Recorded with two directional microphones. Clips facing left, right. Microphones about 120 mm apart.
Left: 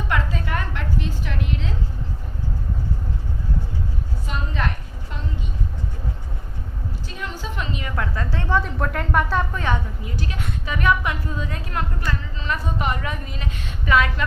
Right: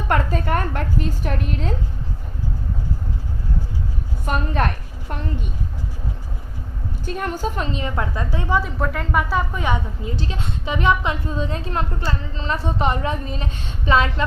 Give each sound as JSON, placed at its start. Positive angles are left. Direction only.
{"t": 0.1, "sound": "a woman's voice", "side_deg": -45}
{"t": 4.3, "sound": "a woman's voice", "side_deg": -55}
{"t": 7.0, "sound": "a woman's voice", "side_deg": -50}
{"t": 10.0, "sound": "a woman's voice", "side_deg": -25}